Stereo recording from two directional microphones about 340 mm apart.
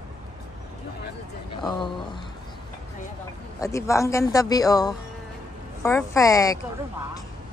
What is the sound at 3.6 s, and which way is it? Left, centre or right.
A man's voice, centre.